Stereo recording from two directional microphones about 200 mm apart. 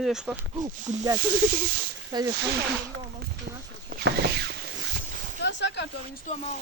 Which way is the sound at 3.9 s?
50° right (ahead or behind).